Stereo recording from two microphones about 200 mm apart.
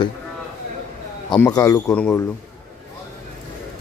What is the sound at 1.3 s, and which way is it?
Speech, 20° left (ahead or behind).